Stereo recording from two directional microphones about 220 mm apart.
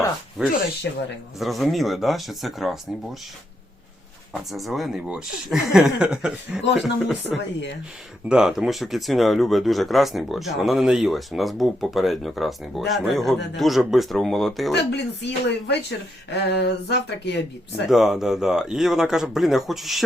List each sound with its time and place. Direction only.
0.4 s speech: 5° right (ahead or behind)
0.9 s speech: 50° left (ahead or behind)
1.4 s speech: centre (ahead or behind)
4.5 s speech: centre (ahead or behind)
14.7 s speech: 50° left (ahead or behind)
17.8 s speech: centre (ahead or behind)